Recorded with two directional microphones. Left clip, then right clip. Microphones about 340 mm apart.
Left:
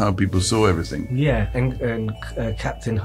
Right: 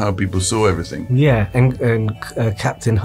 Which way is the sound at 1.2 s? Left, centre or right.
Right.